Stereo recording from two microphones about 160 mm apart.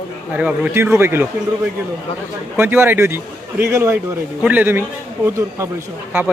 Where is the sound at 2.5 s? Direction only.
15° right (ahead or behind).